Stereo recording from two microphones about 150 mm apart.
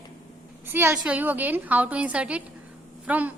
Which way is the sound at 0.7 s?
15° right (ahead or behind).